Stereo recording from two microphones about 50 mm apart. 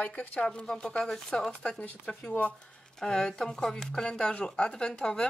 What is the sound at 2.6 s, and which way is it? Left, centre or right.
Speech, centre.